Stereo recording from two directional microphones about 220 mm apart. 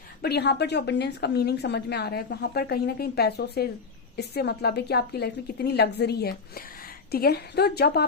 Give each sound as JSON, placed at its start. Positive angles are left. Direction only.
{"t": 0.2, "sound": "a woman's voice", "side_deg": 45}